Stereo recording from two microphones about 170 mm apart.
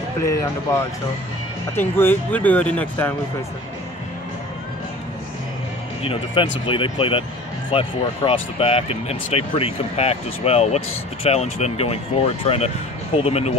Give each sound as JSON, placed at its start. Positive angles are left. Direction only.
{"t": 0.2, "sound": "speech", "side_deg": 20}
{"t": 1.8, "sound": "speech", "side_deg": 10}
{"t": 6.0, "sound": "speech", "side_deg": 30}